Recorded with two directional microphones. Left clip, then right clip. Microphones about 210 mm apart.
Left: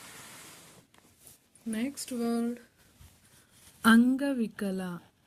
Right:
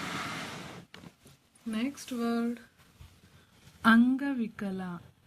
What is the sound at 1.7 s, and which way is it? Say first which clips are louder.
Speech: even; 30° left (ahead or behind).